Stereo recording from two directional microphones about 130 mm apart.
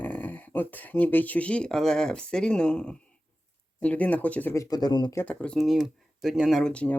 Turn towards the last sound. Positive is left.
turn(degrees=10)  # may be behind; listen again after turning